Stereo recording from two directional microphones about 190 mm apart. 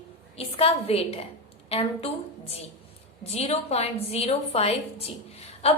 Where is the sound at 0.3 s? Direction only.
30° left (ahead or behind).